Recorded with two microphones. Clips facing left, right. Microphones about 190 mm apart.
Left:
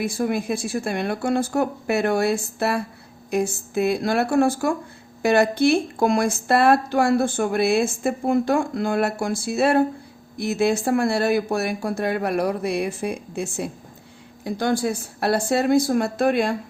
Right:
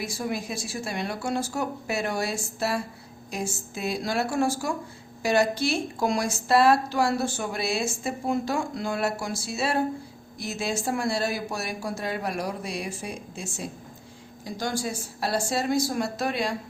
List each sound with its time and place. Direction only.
0.0 s speech: 55° left (ahead or behind)